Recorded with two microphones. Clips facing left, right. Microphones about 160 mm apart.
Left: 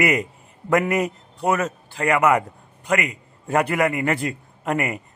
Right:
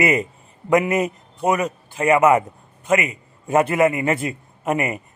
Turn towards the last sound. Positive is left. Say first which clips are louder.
# right 2 dB
turn(degrees=-20)  # may be behind; listen again after turning